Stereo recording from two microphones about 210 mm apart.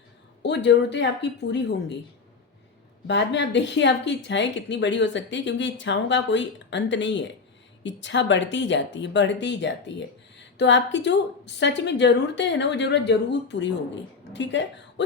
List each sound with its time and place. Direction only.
0.4 s a woman's voice: 55° left (ahead or behind)
3.1 s a woman's voice: 55° left (ahead or behind)